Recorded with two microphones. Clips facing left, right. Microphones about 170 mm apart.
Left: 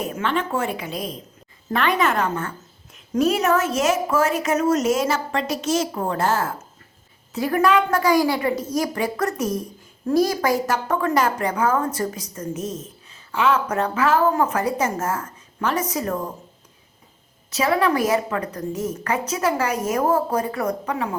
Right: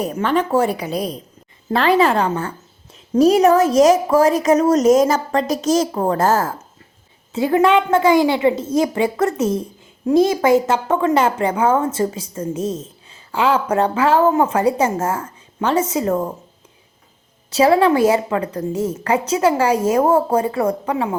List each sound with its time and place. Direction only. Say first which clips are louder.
0.0 s a woman's voice: right 5 dB; 40° right (ahead or behind)
7.3 s a woman's voice: right 4 dB; 25° right (ahead or behind)
17.5 s a woman's voice: right 7 dB; 30° right (ahead or behind)